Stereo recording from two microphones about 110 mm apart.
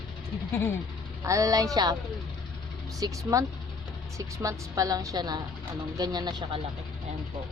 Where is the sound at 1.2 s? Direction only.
30° right (ahead or behind).